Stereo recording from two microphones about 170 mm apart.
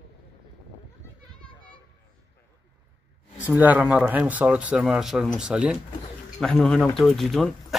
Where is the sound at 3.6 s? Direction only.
10° right (ahead or behind).